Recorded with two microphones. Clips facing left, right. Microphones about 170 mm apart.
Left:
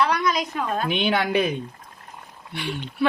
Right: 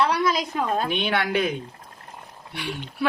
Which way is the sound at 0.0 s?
30° right (ahead or behind).